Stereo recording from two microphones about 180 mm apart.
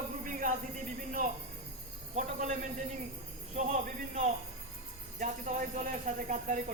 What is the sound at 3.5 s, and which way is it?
Speech, 40° right (ahead or behind).